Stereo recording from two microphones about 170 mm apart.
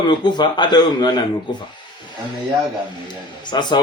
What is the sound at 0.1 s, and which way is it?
Speech, 25° left (ahead or behind).